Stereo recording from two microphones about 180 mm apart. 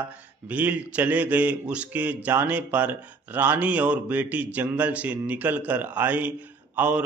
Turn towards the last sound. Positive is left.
turn(degrees=-10)  # may be behind; listen again after turning